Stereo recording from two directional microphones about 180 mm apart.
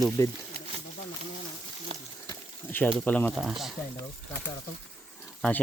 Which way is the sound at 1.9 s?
30° right (ahead or behind).